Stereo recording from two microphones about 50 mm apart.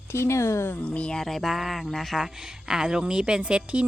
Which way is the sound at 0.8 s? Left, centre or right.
Left.